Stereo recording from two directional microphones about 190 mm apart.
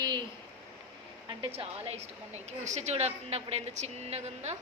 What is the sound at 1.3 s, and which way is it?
A woman's voice, 30° right (ahead or behind).